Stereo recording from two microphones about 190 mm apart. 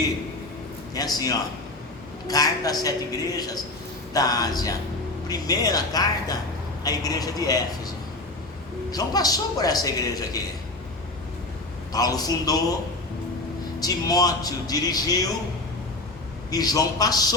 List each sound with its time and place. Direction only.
0.9 s a man's voice: 20° left (ahead or behind)
8.9 s a man's voice: 20° left (ahead or behind)
11.9 s a man's voice: 20° left (ahead or behind)
13.7 s a man's voice: 20° left (ahead or behind)
16.5 s a man's voice: 20° left (ahead or behind)